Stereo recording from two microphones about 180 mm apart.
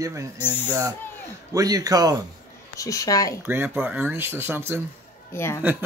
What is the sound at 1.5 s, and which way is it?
Speech, 20° right (ahead or behind).